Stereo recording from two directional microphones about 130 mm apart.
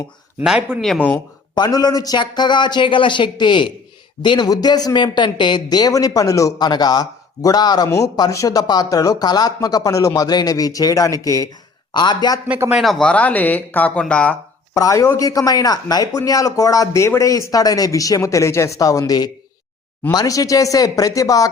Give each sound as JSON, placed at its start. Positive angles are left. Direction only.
{"t": 0.4, "sound": "speech", "side_deg": -5}
{"t": 1.5, "sound": "a man's voice", "side_deg": 30}
{"t": 12.5, "sound": "speech", "side_deg": -10}
{"t": 12.8, "sound": "speech", "side_deg": 5}
{"t": 14.8, "sound": "a man's voice", "side_deg": 25}